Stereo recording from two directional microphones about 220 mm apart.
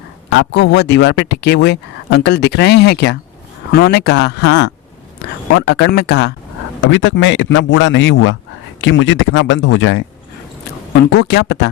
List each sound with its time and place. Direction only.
0.3 s speech: 50° left (ahead or behind)
11.1 s speech: 50° left (ahead or behind)